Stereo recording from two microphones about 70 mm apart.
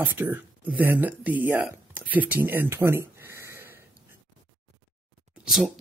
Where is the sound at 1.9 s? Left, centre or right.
Right.